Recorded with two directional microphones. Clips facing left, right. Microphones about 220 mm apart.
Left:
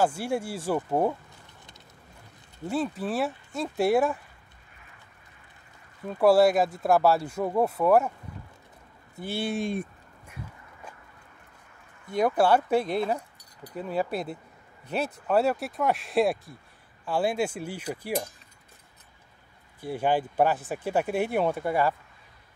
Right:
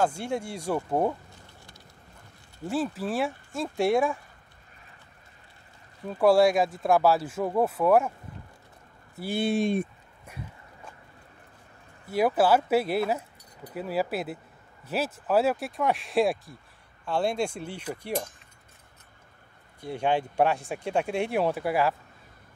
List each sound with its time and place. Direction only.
0.0 s speech: 5° left (ahead or behind)
2.6 s speech: centre (ahead or behind)
6.0 s speech: centre (ahead or behind)
9.2 s speech: 15° right (ahead or behind)
12.1 s speech: 5° right (ahead or behind)
19.8 s speech: 5° left (ahead or behind)